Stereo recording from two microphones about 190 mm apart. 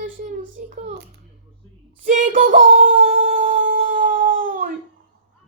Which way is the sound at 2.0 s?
45° right (ahead or behind).